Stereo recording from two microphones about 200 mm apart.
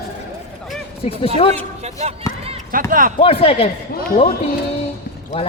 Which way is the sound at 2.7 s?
45° right (ahead or behind).